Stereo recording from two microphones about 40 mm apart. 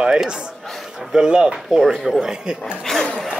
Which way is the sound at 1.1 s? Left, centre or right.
Right.